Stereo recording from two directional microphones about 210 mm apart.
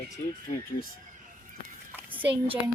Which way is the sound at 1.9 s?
10° right (ahead or behind).